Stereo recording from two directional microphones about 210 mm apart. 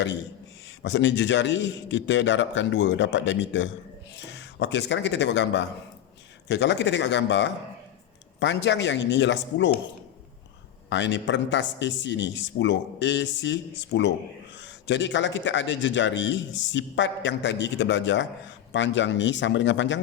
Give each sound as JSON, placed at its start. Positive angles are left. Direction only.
{"t": 0.8, "sound": "a man's voice", "side_deg": 60}
{"t": 10.8, "sound": "a man's voice", "side_deg": 60}